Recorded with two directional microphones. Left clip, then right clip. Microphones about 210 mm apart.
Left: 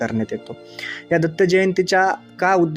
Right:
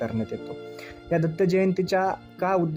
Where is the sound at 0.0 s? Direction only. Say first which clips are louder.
Left 6 dB; 20° left (ahead or behind).